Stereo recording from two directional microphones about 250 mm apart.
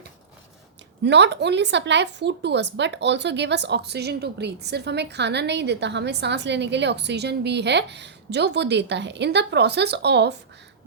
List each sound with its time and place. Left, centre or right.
1.0 s a woman's voice: right